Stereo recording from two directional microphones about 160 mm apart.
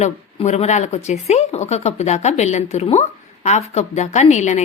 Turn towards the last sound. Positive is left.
turn(degrees=45)  # may be behind; listen again after turning